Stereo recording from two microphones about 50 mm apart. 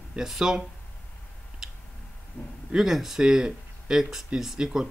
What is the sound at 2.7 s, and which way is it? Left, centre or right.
Speech, centre.